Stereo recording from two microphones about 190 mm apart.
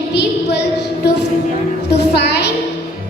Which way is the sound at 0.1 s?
60° left (ahead or behind).